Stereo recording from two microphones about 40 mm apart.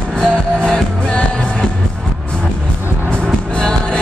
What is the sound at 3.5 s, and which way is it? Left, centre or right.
Music, left.